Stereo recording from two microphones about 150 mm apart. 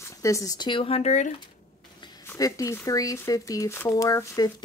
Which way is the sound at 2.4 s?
20° left (ahead or behind).